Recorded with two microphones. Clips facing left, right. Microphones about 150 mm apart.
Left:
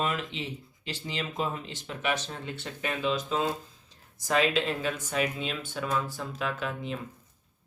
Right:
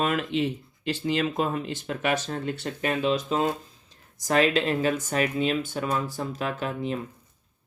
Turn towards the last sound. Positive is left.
turn(degrees=-45)  # may be behind; listen again after turning